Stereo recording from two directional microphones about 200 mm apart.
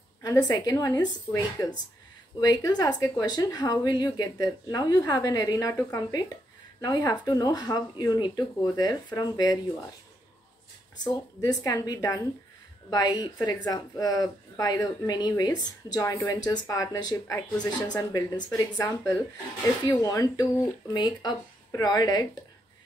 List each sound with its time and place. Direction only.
0.2 s speech: 20° left (ahead or behind)
11.4 s speech: 20° left (ahead or behind)